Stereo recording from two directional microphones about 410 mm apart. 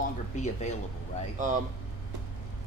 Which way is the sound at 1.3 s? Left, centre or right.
Centre.